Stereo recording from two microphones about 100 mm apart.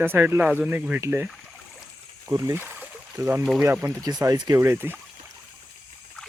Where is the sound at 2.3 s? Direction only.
30° right (ahead or behind).